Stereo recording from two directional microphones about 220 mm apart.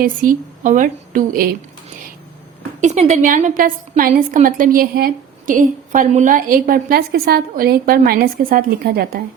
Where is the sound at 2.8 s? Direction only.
30° right (ahead or behind).